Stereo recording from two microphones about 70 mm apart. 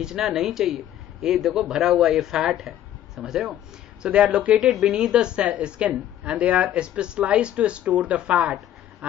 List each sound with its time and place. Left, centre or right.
0.0 s a man's voice: centre